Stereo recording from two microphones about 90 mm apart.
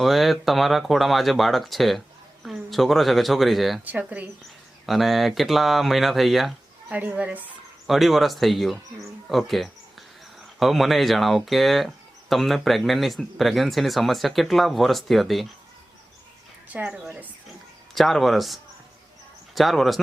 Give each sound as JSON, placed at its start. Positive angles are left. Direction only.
{"t": 0.0, "sound": "speech", "side_deg": 0}
{"t": 3.8, "sound": "a woman's voice", "side_deg": -15}
{"t": 4.9, "sound": "speech", "side_deg": 0}
{"t": 6.9, "sound": "a woman's voice", "side_deg": -15}
{"t": 7.9, "sound": "speech", "side_deg": 0}
{"t": 16.7, "sound": "a woman's voice", "side_deg": -15}
{"t": 17.9, "sound": "speech", "side_deg": 0}